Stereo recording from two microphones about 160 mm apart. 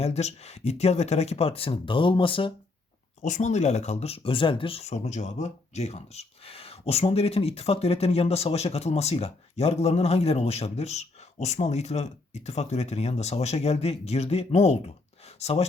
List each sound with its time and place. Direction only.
0.0 s speech: 45° left (ahead or behind)
3.2 s speech: 50° left (ahead or behind)